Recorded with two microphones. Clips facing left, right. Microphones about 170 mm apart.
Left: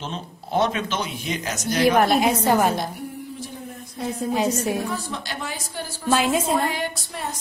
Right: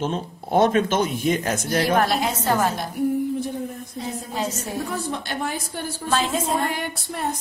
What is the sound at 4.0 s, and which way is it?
Speech, 55° left (ahead or behind).